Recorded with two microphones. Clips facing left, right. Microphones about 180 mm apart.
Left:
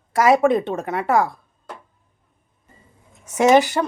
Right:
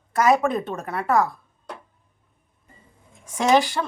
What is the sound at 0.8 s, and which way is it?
Speech, 90° left.